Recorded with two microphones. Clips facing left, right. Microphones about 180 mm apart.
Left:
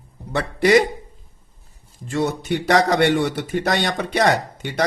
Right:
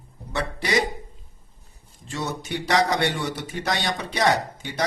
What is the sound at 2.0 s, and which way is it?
A man's voice, 55° left (ahead or behind).